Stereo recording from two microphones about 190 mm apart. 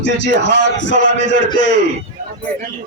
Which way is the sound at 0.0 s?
70° left (ahead or behind).